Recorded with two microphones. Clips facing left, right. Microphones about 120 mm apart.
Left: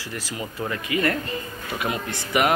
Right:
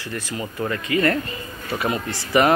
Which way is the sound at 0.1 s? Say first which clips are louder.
Right 3 dB; 15° left (ahead or behind).